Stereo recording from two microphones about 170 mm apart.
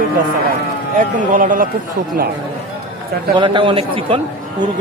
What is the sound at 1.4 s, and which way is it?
Speech, 55° right (ahead or behind).